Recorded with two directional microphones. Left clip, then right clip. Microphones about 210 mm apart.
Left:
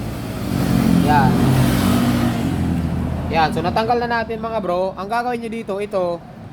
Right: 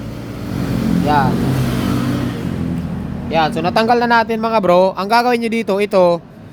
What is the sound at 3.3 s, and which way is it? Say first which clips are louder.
Speech: right 3 dB; 40° right (ahead or behind).